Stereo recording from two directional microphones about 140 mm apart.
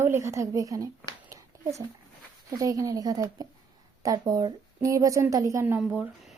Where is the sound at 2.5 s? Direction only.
25° right (ahead or behind).